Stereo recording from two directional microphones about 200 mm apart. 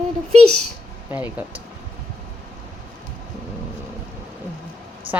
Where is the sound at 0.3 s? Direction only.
90° right.